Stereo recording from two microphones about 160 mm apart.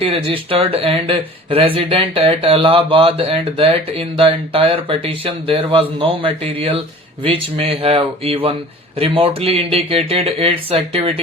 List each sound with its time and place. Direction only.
0.0 s speech: 35° right (ahead or behind)